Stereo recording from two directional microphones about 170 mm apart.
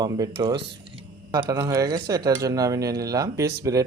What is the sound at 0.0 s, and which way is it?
Speech, 20° right (ahead or behind).